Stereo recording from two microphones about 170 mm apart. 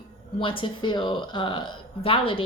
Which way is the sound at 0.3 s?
30° left (ahead or behind).